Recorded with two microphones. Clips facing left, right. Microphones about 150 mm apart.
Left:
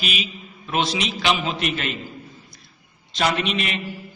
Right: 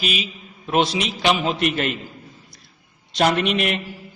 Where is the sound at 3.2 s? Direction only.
50° right (ahead or behind).